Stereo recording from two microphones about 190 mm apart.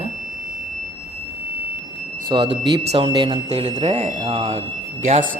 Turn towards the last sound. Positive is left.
turn(degrees=-35)  # may be behind; listen again after turning